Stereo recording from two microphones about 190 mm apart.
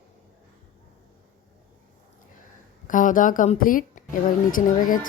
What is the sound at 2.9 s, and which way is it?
Speech, 45° left (ahead or behind).